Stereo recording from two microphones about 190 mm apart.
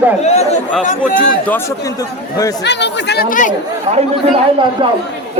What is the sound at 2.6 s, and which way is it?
Speech, 65° left (ahead or behind).